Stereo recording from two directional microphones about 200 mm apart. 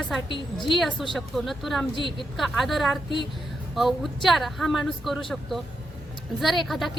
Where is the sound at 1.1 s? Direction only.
Centre (ahead or behind).